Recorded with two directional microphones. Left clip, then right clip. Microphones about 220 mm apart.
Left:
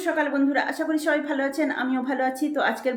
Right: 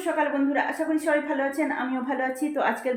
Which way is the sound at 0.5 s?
20° left (ahead or behind).